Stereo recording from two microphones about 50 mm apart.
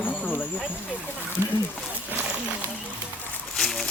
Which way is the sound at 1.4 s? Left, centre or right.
Right.